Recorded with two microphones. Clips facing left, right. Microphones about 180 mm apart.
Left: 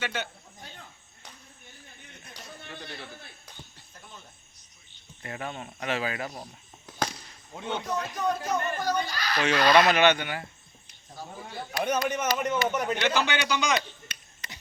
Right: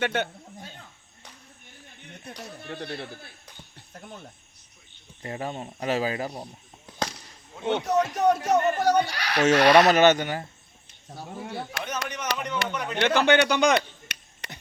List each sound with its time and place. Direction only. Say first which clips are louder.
0.0 s speech: right 7 dB; 55° right (ahead or behind)
2.2 s speech: right 7 dB; 65° right (ahead or behind)
3.8 s a sound: right 7 dB; 60° right (ahead or behind)
5.2 s speech: right 4 dB; 35° right (ahead or behind)
7.7 s speech: right 8 dB; 70° right (ahead or behind)
9.9 s speech: right 4 dB; 40° right (ahead or behind)
11.1 s speech: right 5 dB; 70° right (ahead or behind)
12.0 s speech: left 4 dB; 50° left (ahead or behind)
13.0 s speech: right 7 dB; 55° right (ahead or behind)